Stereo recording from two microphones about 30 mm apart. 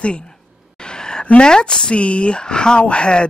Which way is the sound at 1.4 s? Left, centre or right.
Left.